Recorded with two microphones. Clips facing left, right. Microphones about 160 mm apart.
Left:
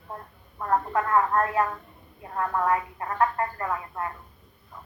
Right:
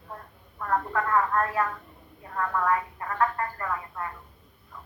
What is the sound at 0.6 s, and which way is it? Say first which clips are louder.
Speech: left 2 dB; 20° left (ahead or behind).